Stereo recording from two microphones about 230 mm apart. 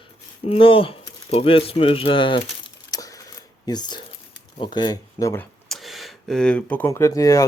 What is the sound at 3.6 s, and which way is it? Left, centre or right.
Speech, centre.